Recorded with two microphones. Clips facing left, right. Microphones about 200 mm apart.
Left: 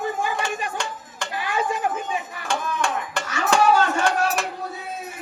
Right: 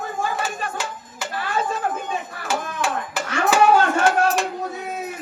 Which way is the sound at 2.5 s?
5° right (ahead or behind).